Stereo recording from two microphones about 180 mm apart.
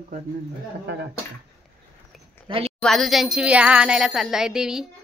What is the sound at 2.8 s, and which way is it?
Speech, centre (ahead or behind).